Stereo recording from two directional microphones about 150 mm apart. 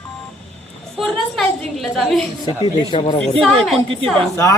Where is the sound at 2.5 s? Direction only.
25° left (ahead or behind).